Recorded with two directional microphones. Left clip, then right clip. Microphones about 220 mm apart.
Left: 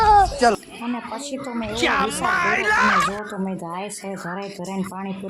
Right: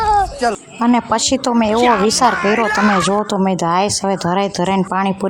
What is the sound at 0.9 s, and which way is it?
Speech, 40° right (ahead or behind).